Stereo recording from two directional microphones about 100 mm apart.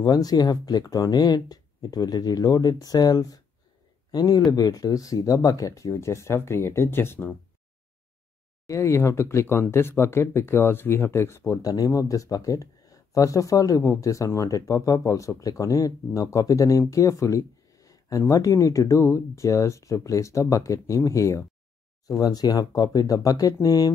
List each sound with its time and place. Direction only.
0.0 s speech: 40° left (ahead or behind); by 7.3 s 20° left (ahead or behind)
8.6 s speech: 30° left (ahead or behind)